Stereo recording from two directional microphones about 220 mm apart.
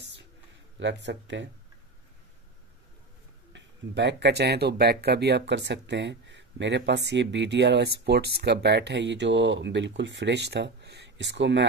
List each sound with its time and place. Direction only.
0.7 s speech: 55° right (ahead or behind)
3.5 s speech: 50° right (ahead or behind)